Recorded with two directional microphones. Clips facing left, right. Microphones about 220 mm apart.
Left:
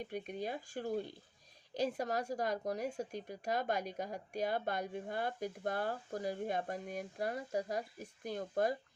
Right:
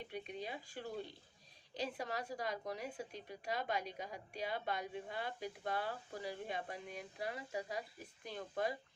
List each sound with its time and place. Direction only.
0.0 s speech: 45° left (ahead or behind)